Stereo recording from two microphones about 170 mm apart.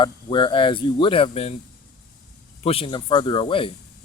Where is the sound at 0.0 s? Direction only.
30° left (ahead or behind).